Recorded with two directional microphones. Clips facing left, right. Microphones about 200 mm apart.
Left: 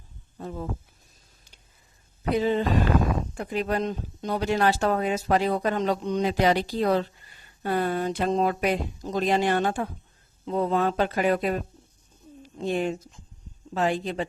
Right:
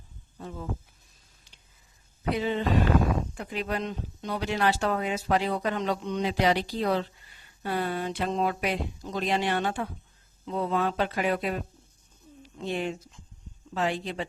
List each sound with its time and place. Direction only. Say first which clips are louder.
0.3 s speech: left 4 dB; 40° left (ahead or behind)
2.3 s speech: left 3 dB; 40° left (ahead or behind)
12.4 s a sound: left 4 dB; 45° left (ahead or behind)
13.7 s speech: left 4 dB; 45° left (ahead or behind)